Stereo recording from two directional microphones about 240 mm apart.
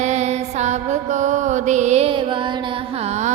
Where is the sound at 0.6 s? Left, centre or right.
Right.